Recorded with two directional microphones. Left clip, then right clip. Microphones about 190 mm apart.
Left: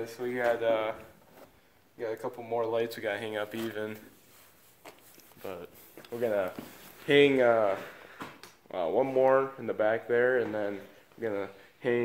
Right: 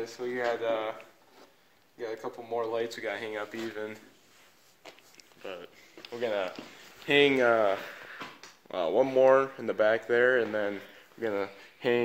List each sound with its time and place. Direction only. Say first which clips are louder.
0.0 s speech: left 1 dB; 30° left (ahead or behind)
2.0 s speech: left 2 dB; 25° left (ahead or behind)
4.8 s a sound: right 1 dB; 20° left (ahead or behind)
6.1 s speech: left 1 dB; 45° left (ahead or behind)
7.1 s speech: left 1 dB; 45° right (ahead or behind)
7.3 s speech: even; 60° right (ahead or behind)